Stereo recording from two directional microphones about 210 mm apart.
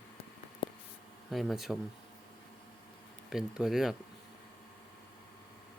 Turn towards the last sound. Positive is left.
turn(degrees=0)  # may be behind; listen again after turning